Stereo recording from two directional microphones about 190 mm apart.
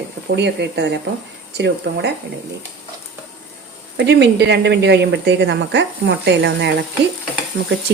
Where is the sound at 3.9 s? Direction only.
65° right (ahead or behind).